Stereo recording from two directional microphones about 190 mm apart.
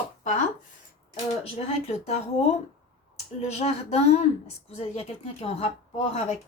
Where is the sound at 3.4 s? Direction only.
35° left (ahead or behind).